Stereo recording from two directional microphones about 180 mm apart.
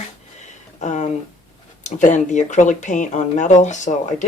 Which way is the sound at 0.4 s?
40° left (ahead or behind).